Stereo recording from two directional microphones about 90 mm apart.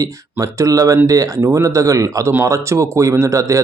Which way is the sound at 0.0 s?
40° right (ahead or behind).